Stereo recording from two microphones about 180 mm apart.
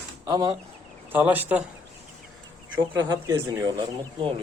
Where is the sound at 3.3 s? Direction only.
20° right (ahead or behind).